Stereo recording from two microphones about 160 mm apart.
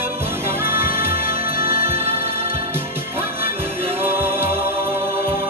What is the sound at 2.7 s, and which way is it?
Music, 15° right (ahead or behind).